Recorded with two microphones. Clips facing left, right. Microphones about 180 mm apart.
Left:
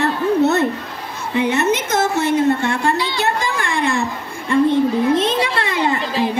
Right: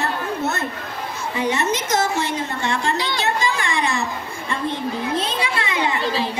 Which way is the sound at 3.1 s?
55° left (ahead or behind).